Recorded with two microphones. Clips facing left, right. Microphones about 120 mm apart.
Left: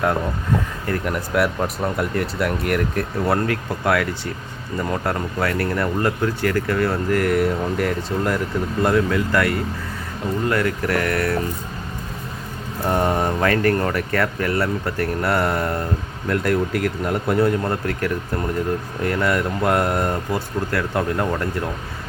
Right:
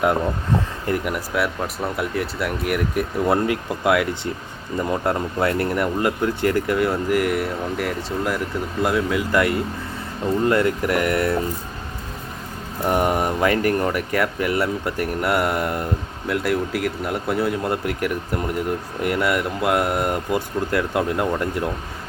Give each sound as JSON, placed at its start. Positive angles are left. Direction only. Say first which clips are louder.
{"t": 0.9, "sound": "speech", "louder": "even", "side_deg": -10}
{"t": 12.8, "sound": "speech", "louder": "even", "side_deg": -10}